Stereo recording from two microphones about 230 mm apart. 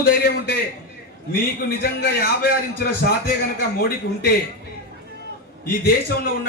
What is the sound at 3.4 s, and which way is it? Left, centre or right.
Speech, left.